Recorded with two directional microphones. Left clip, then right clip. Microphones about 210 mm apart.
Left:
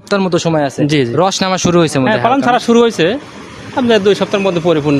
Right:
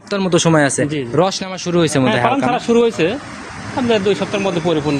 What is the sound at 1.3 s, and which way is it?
Speech, 40° left (ahead or behind).